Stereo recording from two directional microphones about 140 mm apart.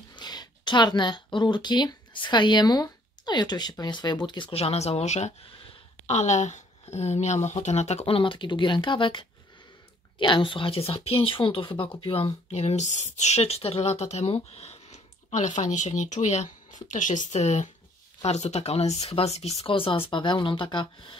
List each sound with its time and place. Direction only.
0.1 s a woman's voice: 30° left (ahead or behind)